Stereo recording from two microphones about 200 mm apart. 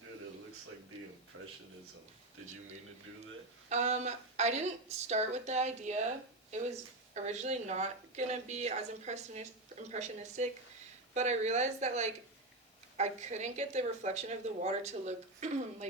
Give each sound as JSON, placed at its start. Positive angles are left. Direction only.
{"t": 1.3, "sound": "speech", "side_deg": -75}
{"t": 3.7, "sound": "a woman's voice", "side_deg": -35}
{"t": 7.1, "sound": "a woman's voice", "side_deg": -35}